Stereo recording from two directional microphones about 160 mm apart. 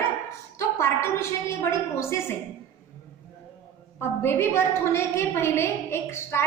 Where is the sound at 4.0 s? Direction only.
15° left (ahead or behind).